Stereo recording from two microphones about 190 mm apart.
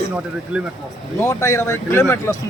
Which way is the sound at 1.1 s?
15° left (ahead or behind).